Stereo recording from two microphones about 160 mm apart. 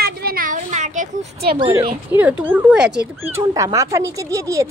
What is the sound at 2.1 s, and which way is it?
Speech, 10° right (ahead or behind).